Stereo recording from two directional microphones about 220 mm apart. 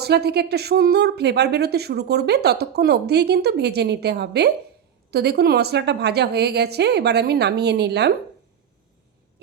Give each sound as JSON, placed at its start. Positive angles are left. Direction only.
{"t": 0.0, "sound": "a woman's voice", "side_deg": -45}